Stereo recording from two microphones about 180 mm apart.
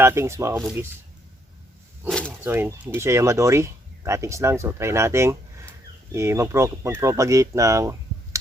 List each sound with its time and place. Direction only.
0.0 s speech: 15° right (ahead or behind)
2.0 s speech: 5° left (ahead or behind)
2.4 s speech: 10° right (ahead or behind)